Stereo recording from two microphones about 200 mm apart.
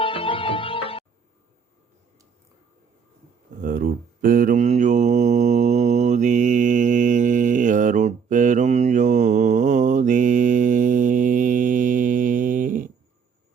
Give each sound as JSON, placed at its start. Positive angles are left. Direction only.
{"t": 0.0, "sound": "music", "side_deg": 25}
{"t": 3.6, "sound": "mantra", "side_deg": -45}